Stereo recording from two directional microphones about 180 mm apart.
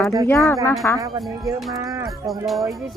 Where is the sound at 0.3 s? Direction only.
15° left (ahead or behind).